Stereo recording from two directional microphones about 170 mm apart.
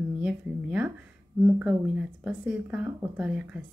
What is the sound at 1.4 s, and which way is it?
Speech, 10° right (ahead or behind).